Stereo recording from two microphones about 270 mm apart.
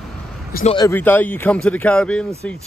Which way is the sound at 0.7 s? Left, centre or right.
Centre.